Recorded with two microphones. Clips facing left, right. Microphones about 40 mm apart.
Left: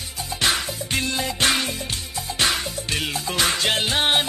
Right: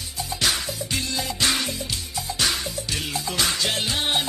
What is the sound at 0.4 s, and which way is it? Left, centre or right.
Music, left.